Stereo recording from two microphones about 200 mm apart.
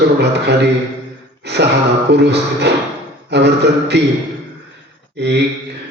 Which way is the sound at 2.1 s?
55° right (ahead or behind).